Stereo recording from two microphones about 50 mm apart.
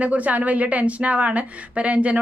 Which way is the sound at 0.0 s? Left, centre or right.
Right.